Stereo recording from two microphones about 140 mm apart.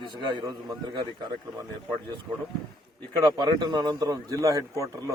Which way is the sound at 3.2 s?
30° right (ahead or behind).